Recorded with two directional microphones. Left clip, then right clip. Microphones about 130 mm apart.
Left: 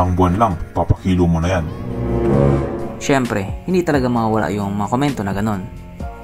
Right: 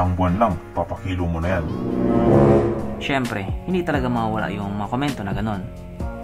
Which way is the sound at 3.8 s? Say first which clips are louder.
Left 5 dB; 60° left (ahead or behind).